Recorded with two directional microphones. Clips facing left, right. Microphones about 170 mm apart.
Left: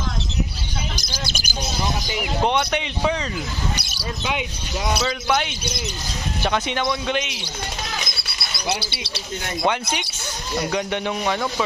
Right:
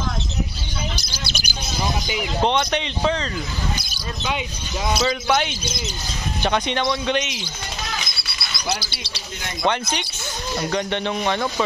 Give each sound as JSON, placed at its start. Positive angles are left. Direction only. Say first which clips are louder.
{"t": 0.9, "sound": "bird", "louder": "left 1 dB", "side_deg": 45}
{"t": 2.4, "sound": "a man's voice", "louder": "right 1 dB", "side_deg": 10}
{"t": 8.9, "sound": "speech", "louder": "left 3 dB", "side_deg": 60}
{"t": 9.7, "sound": "a man's voice", "louder": "right 2 dB", "side_deg": 5}